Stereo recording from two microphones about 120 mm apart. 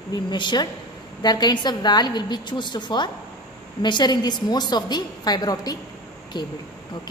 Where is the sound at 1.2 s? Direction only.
35° left (ahead or behind).